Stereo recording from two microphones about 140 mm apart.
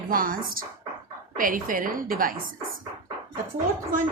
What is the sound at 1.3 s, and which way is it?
A woman's voice, 80° right.